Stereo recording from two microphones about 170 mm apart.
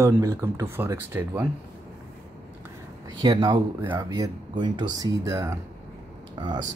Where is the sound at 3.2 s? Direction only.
25° right (ahead or behind).